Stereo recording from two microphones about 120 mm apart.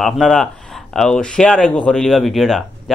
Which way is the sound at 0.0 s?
5° left (ahead or behind).